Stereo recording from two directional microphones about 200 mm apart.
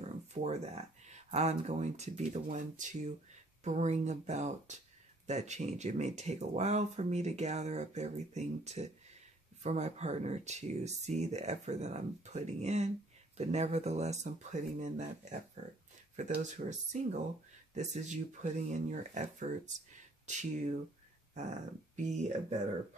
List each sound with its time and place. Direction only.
0.0 s speech: 35° right (ahead or behind)